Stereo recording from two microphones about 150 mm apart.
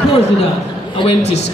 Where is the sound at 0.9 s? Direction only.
40° left (ahead or behind).